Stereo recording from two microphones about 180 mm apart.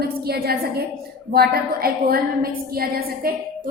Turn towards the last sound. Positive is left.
turn(degrees=-55)  # may be behind; listen again after turning